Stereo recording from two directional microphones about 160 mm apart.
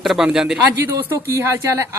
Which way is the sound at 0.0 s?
Centre (ahead or behind).